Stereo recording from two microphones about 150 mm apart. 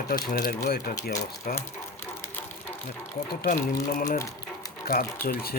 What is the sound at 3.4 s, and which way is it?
Speech, 70° left (ahead or behind).